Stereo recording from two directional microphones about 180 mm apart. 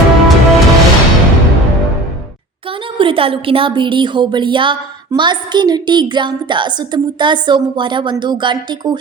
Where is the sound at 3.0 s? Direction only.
30° right (ahead or behind).